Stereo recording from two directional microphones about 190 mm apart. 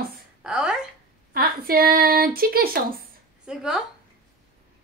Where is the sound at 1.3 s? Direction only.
50° right (ahead or behind).